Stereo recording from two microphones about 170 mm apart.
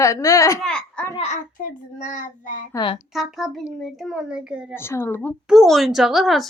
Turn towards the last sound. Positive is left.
turn(degrees=0)  # may be behind; listen again after turning